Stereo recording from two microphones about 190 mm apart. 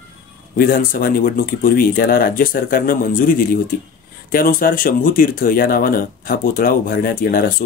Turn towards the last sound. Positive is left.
turn(degrees=50)  # may be behind; listen again after turning